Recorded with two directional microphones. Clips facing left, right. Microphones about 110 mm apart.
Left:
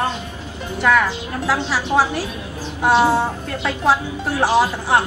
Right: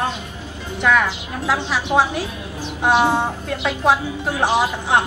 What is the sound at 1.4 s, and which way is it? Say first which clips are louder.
A woman's voice: even; 15° right (ahead or behind).